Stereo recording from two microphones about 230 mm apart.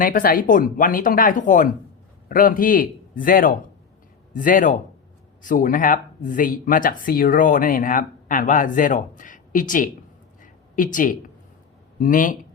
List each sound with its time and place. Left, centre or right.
0.0 s speech: left
10.4 s a sound: left
11.9 s speech: left